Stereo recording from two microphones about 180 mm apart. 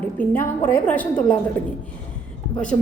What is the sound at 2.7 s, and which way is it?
Speech, 20° left (ahead or behind).